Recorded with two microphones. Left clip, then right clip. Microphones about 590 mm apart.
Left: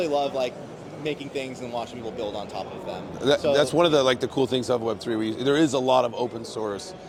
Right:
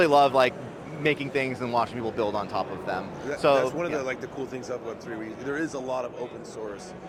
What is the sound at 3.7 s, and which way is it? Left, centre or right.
A man's voice, left.